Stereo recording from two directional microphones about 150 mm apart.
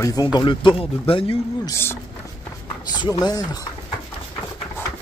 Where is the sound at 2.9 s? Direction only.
25° left (ahead or behind).